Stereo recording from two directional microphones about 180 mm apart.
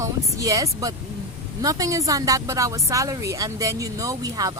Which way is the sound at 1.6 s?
20° right (ahead or behind).